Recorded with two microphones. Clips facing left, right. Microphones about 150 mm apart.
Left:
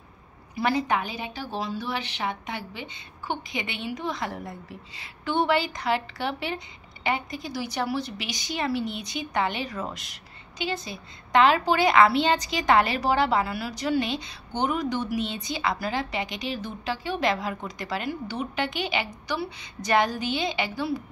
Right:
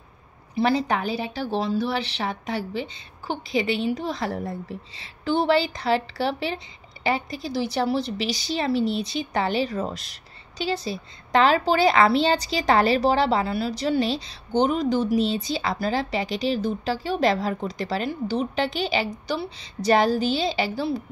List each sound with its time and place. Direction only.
0.6 s a woman's voice: 30° right (ahead or behind)